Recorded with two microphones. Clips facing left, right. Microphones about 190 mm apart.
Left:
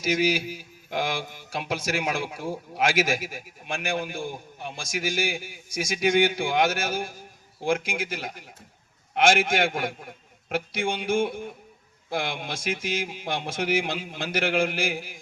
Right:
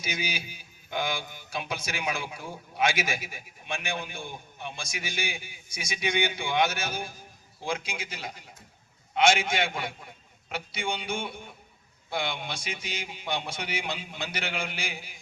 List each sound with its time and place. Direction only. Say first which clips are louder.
0.0 s speech: left 11 dB; 90° left
0.9 s a man's voice: left 3 dB; 45° left (ahead or behind)
9.2 s a man's voice: left 3 dB; 50° left (ahead or behind)